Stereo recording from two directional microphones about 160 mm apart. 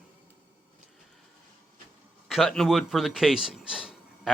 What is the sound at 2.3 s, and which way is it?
A man's voice, centre (ahead or behind).